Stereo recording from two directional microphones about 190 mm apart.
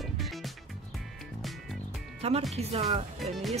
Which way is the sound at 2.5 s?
35° right (ahead or behind).